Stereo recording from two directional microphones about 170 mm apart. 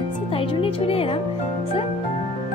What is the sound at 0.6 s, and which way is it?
Speech, 35° left (ahead or behind).